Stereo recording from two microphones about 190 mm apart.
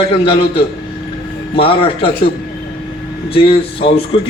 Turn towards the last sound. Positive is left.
turn(degrees=30)  # may be behind; listen again after turning